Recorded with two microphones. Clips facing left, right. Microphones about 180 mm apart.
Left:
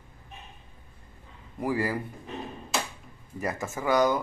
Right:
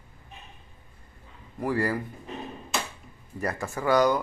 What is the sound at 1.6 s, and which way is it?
Speech, 10° left (ahead or behind).